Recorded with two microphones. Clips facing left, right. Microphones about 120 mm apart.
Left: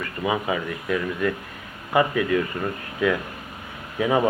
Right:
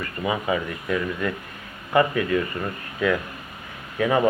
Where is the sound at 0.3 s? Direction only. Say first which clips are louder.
Even; 10° left (ahead or behind).